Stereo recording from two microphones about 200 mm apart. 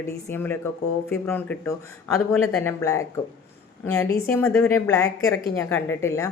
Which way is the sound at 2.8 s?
15° left (ahead or behind).